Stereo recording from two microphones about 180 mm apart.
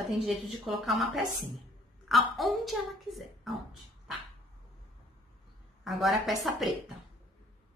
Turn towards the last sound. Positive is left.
turn(degrees=0)  # may be behind; listen again after turning